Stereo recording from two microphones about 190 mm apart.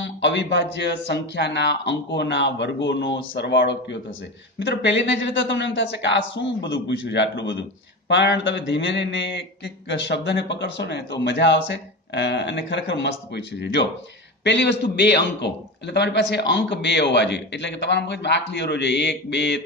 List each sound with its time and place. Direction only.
0.0 s a man's voice: 70° left (ahead or behind)